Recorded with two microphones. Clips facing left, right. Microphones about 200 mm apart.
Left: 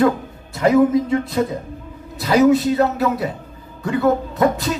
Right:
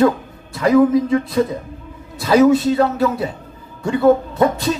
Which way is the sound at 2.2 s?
25° right (ahead or behind).